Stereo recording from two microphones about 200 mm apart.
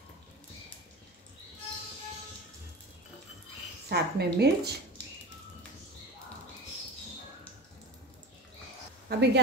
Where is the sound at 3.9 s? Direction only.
55° right (ahead or behind).